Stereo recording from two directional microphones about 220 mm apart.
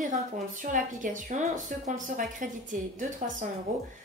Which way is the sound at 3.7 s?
40° right (ahead or behind).